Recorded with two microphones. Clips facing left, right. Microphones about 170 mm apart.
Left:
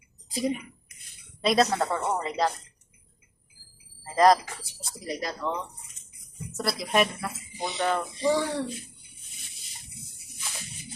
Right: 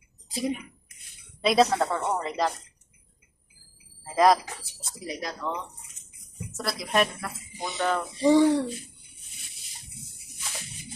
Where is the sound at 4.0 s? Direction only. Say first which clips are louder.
Left 1 dB; 5° right (ahead or behind).